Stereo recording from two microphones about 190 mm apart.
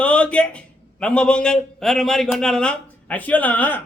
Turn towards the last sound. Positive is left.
turn(degrees=10)  # may be behind; listen again after turning